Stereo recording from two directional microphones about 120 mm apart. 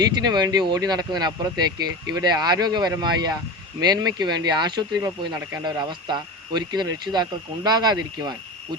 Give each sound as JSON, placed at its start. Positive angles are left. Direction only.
{"t": 0.0, "sound": "speech", "side_deg": -35}